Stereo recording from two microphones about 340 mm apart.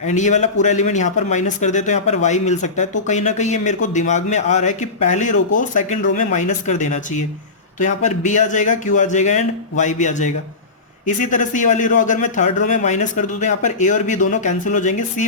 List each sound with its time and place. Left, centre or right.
0.0 s speech: left